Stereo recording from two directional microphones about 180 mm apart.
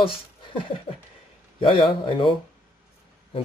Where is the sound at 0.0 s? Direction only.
30° left (ahead or behind).